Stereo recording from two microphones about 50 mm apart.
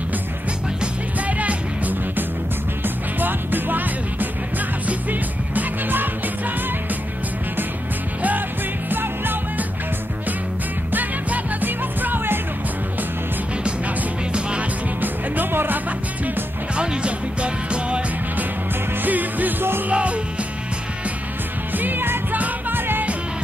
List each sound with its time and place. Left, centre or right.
1.2 s music: right
8.9 s music: right
10.9 s music: right
15.0 s music: right
16.7 s music: centre
19.0 s music: right
21.7 s music: right